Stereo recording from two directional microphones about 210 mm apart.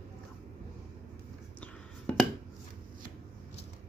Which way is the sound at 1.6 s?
5° left (ahead or behind).